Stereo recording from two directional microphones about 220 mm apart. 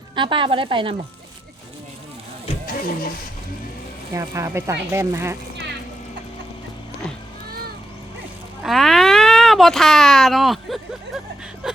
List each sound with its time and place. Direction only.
0.2 s speech: 20° right (ahead or behind)
2.6 s speech: 40° left (ahead or behind)
4.1 s speech: 15° right (ahead or behind)
8.6 s speech: centre (ahead or behind)
11.6 s a sound: 5° right (ahead or behind)